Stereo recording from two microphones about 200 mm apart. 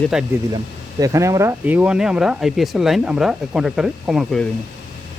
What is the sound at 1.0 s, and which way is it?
Speech, 15° right (ahead or behind).